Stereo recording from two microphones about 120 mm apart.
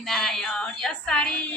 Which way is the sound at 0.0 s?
Centre (ahead or behind).